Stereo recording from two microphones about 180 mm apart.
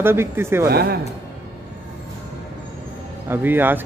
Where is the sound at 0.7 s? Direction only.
60° right (ahead or behind).